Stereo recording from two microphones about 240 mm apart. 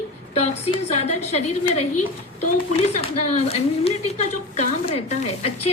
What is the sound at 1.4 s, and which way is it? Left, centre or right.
Speech, left.